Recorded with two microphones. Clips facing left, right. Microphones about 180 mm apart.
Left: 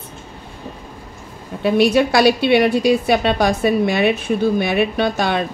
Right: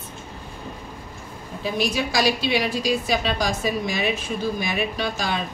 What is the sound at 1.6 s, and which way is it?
A woman's voice, 65° left (ahead or behind).